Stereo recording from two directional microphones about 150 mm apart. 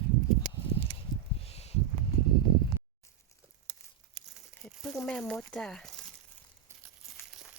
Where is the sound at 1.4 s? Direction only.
45° left (ahead or behind).